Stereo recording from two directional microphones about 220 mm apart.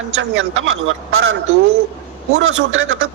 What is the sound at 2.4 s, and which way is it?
Speech, 65° right (ahead or behind).